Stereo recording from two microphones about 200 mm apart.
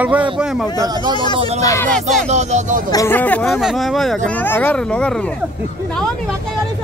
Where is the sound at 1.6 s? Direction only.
15° left (ahead or behind).